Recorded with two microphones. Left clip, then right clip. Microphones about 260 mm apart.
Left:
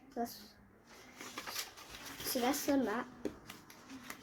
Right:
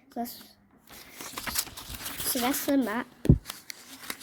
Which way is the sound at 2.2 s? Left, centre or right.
Right.